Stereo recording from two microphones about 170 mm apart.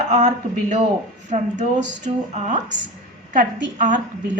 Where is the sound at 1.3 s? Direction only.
45° right (ahead or behind).